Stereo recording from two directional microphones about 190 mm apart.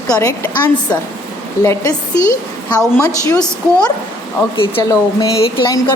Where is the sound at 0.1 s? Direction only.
15° left (ahead or behind).